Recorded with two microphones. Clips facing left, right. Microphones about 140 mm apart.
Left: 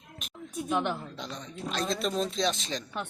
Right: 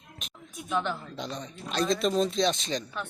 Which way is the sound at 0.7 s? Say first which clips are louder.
Even; 15° left (ahead or behind).